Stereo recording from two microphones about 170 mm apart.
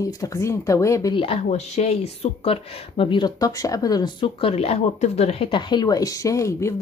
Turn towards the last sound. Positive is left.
turn(degrees=15)  # may be behind; listen again after turning